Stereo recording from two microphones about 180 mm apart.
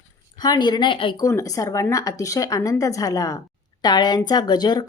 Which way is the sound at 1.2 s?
20° left (ahead or behind).